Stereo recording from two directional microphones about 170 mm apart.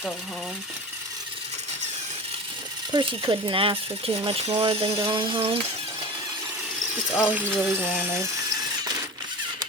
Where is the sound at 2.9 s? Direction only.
30° right (ahead or behind).